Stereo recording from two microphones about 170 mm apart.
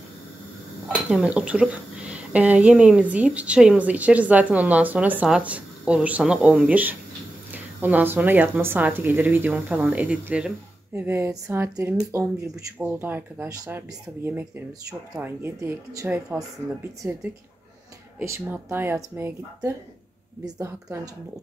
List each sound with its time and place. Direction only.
1.1 s speech: 5° right (ahead or behind)
18.2 s speech: 10° right (ahead or behind)